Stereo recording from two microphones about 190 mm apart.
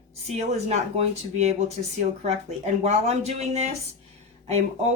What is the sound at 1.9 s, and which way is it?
Speech, 35° right (ahead or behind).